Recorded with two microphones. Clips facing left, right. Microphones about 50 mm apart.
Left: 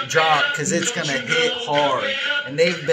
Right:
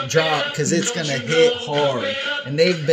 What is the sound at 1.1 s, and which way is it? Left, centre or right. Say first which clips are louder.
Speech: right 5 dB; left.